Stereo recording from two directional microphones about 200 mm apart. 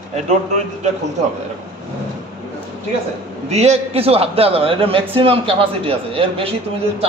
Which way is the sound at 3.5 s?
30° right (ahead or behind).